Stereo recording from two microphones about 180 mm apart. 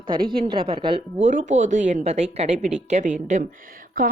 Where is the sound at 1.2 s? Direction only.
40° right (ahead or behind).